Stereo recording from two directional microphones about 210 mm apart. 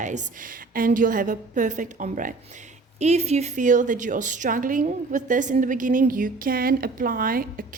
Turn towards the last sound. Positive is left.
turn(degrees=-45)  # may be behind; listen again after turning